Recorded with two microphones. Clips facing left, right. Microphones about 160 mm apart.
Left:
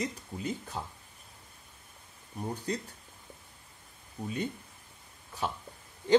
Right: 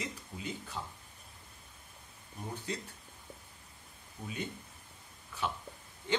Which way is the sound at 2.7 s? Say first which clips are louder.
Left 5 dB; 40° left (ahead or behind).